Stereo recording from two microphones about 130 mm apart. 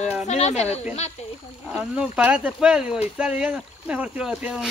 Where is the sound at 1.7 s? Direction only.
5° right (ahead or behind).